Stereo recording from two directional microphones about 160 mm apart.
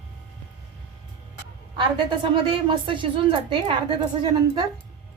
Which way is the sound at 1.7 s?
30° right (ahead or behind).